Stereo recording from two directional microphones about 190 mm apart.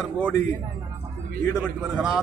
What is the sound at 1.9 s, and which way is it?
Speech, 5° right (ahead or behind).